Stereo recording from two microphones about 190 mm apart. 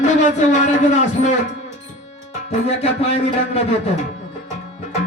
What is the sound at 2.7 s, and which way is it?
Speech, 35° left (ahead or behind).